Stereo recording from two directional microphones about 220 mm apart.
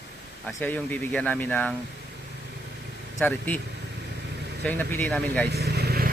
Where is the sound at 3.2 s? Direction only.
5° left (ahead or behind).